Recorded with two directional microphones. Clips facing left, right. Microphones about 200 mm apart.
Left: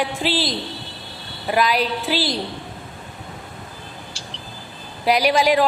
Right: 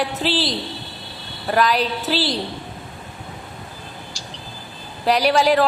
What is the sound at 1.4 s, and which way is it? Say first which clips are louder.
Speech: right 1 dB; 10° left (ahead or behind).